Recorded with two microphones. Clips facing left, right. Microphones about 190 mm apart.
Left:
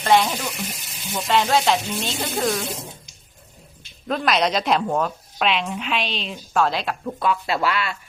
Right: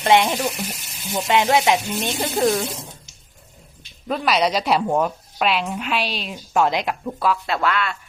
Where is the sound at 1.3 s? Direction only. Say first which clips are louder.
Right 2 dB; 15° right (ahead or behind).